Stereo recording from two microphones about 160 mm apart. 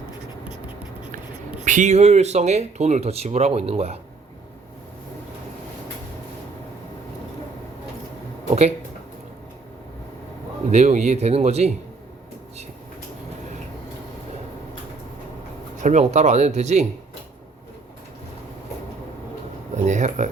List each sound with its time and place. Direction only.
1.6 s speech: 50° right (ahead or behind)
10.7 s speech: 45° right (ahead or behind)
15.8 s speech: 50° right (ahead or behind)
19.7 s a sound: 50° right (ahead or behind)